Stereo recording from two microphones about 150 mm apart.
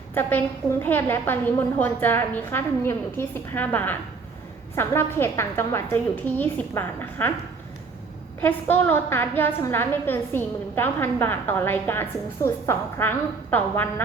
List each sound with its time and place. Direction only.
0.1 s a woman's voice: 15° left (ahead or behind)
8.4 s a woman's voice: 10° left (ahead or behind)